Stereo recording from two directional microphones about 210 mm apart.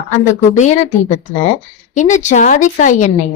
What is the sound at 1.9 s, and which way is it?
A woman's voice, 35° left (ahead or behind).